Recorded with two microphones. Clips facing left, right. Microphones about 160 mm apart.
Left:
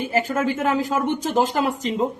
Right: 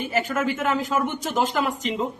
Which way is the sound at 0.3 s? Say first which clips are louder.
Left 2 dB; 30° left (ahead or behind).